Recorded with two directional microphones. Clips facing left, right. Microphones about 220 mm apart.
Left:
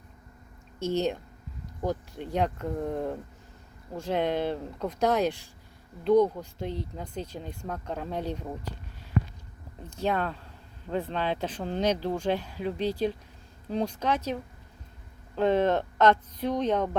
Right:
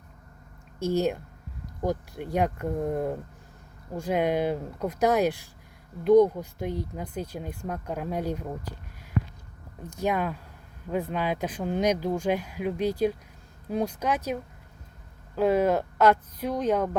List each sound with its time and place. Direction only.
0.8 s speech: 10° right (ahead or behind)
9.9 s speech: 10° right (ahead or behind)
15.4 s speech: 10° right (ahead or behind)